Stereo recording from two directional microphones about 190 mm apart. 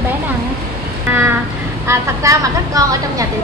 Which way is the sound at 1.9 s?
20° right (ahead or behind).